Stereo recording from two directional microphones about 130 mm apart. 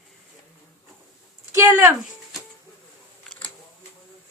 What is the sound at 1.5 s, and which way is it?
Speech, 20° right (ahead or behind).